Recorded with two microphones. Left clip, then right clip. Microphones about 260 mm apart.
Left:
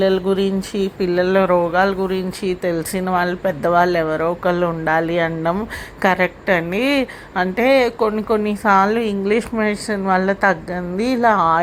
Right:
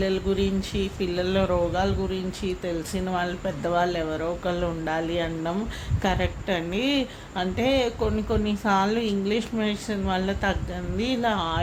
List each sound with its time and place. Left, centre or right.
0.0 s speech: left
0.9 s speech: centre